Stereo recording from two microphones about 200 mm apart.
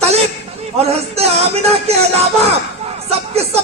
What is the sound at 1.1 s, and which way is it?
Speech, 30° right (ahead or behind).